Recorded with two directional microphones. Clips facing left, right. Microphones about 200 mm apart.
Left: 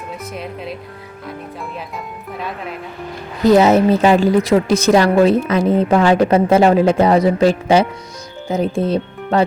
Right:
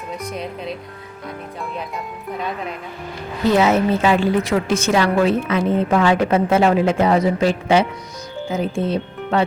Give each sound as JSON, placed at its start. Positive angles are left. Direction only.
{"t": 0.3, "sound": "speech", "side_deg": 5}
{"t": 3.4, "sound": "a woman's voice", "side_deg": 40}